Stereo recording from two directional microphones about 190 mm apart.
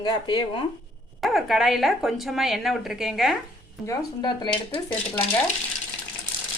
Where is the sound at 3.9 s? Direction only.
25° left (ahead or behind).